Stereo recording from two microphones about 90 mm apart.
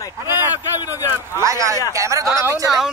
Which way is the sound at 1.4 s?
35° right (ahead or behind).